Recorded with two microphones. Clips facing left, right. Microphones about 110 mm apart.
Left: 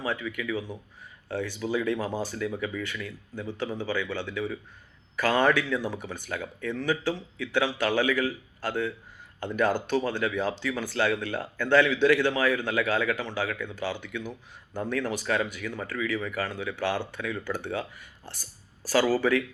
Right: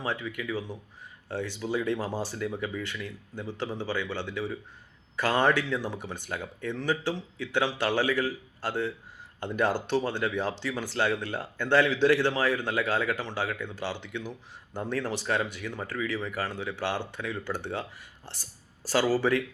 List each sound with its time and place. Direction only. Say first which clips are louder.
0.0 s speech: left 1 dB; 25° right (ahead or behind)
2.0 s speech: left 1 dB; 15° left (ahead or behind)
2.2 s speech: left 1 dB; 20° right (ahead or behind)